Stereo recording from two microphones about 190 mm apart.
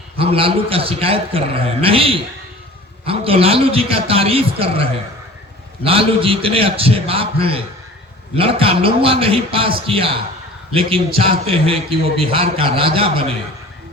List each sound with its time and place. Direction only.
0.2 s a man's voice: 30° right (ahead or behind)